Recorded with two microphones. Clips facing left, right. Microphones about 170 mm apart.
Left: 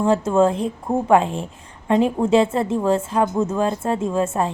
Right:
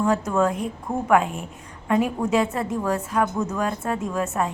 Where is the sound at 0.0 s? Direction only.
25° left (ahead or behind).